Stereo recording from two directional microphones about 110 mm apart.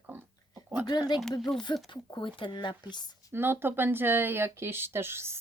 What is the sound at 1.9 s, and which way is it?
Speech, 45° left (ahead or behind).